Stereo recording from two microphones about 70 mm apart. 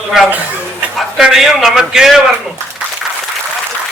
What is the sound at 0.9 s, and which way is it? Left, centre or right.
A man's voice, centre.